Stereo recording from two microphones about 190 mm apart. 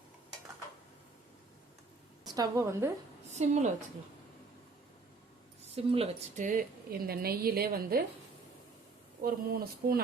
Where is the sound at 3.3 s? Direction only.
35° right (ahead or behind).